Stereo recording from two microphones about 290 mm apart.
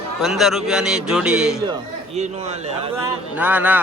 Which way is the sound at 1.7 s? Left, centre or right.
Right.